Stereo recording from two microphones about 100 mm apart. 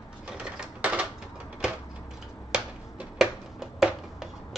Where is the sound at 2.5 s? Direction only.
5° right (ahead or behind).